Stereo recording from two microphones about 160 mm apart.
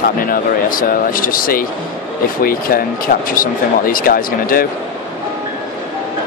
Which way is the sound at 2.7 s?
65° left (ahead or behind).